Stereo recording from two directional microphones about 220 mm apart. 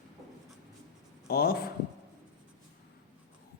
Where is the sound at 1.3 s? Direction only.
45° left (ahead or behind).